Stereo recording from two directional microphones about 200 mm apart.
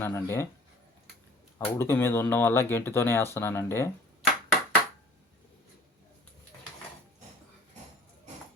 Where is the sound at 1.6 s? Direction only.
10° left (ahead or behind).